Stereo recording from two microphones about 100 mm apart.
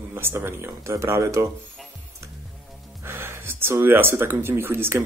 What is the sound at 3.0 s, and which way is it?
Speech, 20° right (ahead or behind).